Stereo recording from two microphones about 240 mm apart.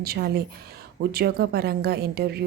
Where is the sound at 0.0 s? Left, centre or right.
Right.